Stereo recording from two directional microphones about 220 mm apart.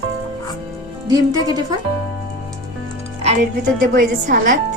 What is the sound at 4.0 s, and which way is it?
Speech, 40° right (ahead or behind).